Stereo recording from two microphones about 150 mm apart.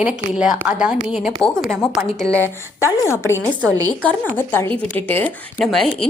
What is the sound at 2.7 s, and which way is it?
Speech, 20° left (ahead or behind).